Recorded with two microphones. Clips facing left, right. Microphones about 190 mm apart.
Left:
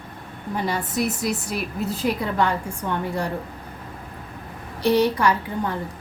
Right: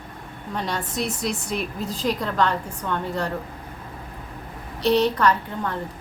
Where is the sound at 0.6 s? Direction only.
5° left (ahead or behind).